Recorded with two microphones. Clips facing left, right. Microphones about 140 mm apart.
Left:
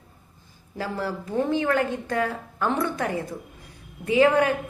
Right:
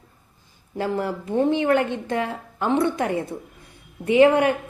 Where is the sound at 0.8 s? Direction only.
25° right (ahead or behind).